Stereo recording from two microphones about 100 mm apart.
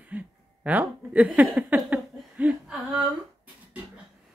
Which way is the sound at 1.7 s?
20° right (ahead or behind).